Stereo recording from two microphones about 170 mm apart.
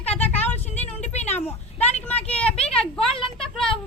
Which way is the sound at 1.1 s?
40° left (ahead or behind).